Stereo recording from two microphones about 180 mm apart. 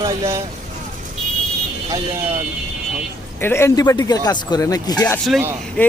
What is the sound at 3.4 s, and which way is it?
Speech, 15° left (ahead or behind).